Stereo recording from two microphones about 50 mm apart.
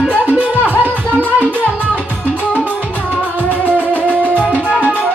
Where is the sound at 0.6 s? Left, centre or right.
Left.